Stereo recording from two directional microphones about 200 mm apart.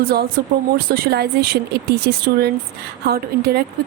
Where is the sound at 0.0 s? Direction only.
50° right (ahead or behind).